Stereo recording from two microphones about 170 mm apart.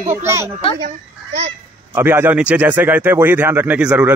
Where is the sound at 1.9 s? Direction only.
15° right (ahead or behind).